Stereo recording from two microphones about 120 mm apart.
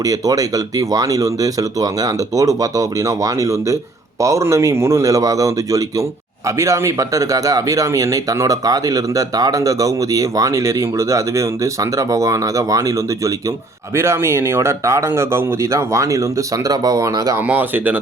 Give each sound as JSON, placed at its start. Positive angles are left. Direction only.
{"t": 0.0, "sound": "speech", "side_deg": -30}
{"t": 13.9, "sound": "speech", "side_deg": -20}
{"t": 17.5, "sound": "speech", "side_deg": -15}